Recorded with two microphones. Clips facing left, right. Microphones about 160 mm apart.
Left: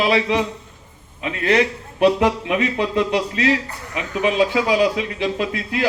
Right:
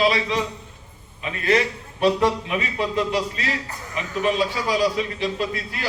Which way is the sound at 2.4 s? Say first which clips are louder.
Left 5 dB; 65° left (ahead or behind).